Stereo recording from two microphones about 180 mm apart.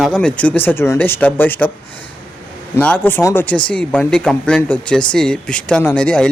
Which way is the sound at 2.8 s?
10° left (ahead or behind).